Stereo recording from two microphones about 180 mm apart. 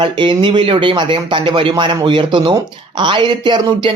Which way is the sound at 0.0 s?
25° right (ahead or behind).